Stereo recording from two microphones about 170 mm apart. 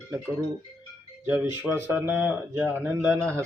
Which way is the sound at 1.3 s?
10° right (ahead or behind).